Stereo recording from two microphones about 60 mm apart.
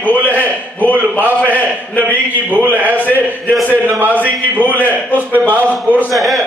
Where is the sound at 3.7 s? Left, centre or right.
Right.